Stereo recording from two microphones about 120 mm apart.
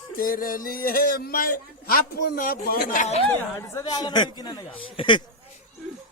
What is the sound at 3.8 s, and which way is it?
Speech, 35° left (ahead or behind).